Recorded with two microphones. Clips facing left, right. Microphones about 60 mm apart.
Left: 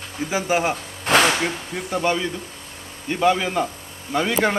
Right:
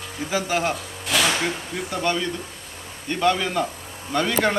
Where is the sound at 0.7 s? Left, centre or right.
Left.